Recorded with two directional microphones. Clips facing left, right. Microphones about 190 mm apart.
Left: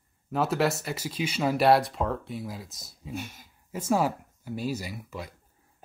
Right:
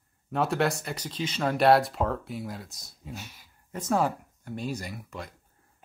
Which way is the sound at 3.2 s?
50° left (ahead or behind).